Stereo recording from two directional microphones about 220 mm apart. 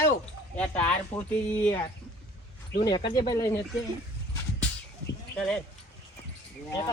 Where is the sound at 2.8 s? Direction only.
20° left (ahead or behind).